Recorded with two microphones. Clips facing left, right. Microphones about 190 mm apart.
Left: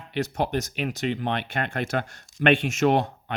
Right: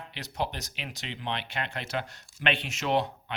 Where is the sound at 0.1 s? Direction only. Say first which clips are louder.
Left 9 dB; 50° left (ahead or behind).